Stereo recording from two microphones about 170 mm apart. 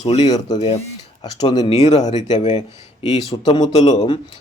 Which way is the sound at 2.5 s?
40° left (ahead or behind).